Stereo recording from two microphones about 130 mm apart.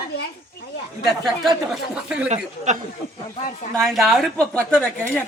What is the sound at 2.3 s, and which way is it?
Speech, 65° right (ahead or behind).